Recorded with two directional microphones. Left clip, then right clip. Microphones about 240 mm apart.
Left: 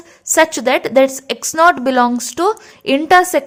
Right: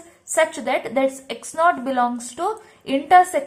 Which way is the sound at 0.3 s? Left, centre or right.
Left.